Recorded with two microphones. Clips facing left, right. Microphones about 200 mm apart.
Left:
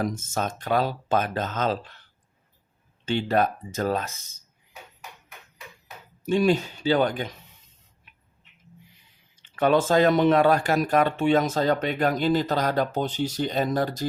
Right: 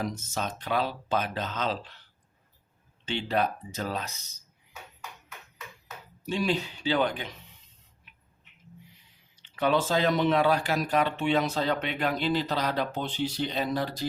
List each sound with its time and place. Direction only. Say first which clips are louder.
0.0 s speech: left 5 dB; 50° left (ahead or behind)
3.1 s speech: left 5 dB; 45° left (ahead or behind)
6.2 s speech: left 7 dB; 50° left (ahead or behind)
9.3 s speech: left 5 dB; 50° left (ahead or behind)